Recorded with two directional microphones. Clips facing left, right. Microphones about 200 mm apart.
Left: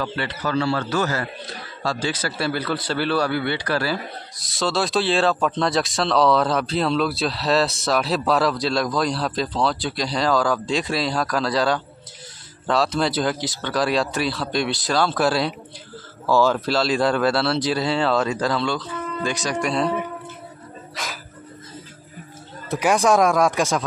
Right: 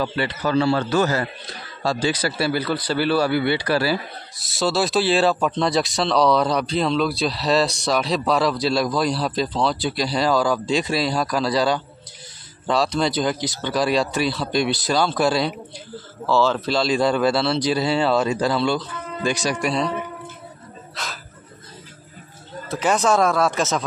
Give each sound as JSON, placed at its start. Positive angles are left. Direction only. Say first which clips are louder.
{"t": 0.0, "sound": "a man's voice", "louder": "right 3 dB", "side_deg": -15}
{"t": 16.3, "sound": "speech", "louder": "left 1 dB", "side_deg": 10}
{"t": 22.7, "sound": "speech", "louder": "left 1 dB", "side_deg": 10}